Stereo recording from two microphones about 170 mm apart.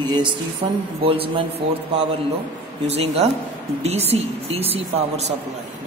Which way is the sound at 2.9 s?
40° right (ahead or behind).